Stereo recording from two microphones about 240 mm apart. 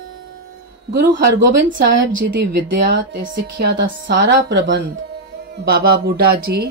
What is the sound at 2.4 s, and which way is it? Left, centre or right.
Speech, right.